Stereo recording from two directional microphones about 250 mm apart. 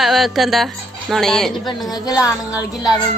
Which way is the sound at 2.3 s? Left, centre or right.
Centre.